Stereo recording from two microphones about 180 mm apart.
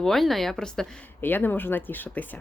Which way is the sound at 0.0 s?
Centre (ahead or behind).